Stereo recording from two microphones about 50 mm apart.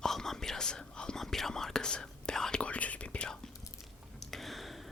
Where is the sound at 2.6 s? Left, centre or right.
Left.